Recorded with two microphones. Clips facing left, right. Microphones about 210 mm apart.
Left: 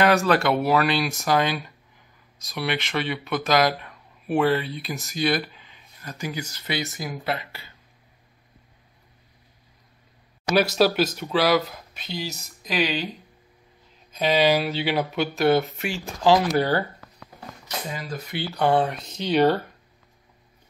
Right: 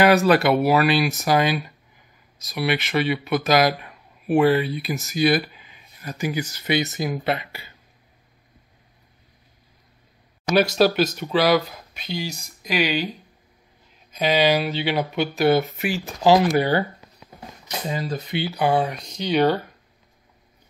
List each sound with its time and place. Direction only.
0.2 s speech: 10° right (ahead or behind)
10.5 s speech: 5° left (ahead or behind)
14.1 s speech: centre (ahead or behind)
16.5 s a sound: 15° right (ahead or behind)
17.8 s speech: 20° right (ahead or behind)
18.5 s speech: centre (ahead or behind)